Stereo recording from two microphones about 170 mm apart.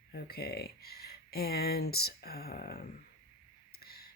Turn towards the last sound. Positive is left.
turn(degrees=65)  # may be behind; listen again after turning